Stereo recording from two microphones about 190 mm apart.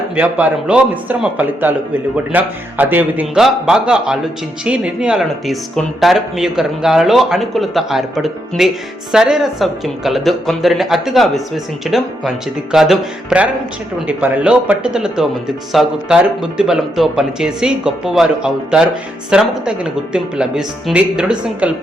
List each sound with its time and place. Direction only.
0.2 s a man's voice: 5° right (ahead or behind)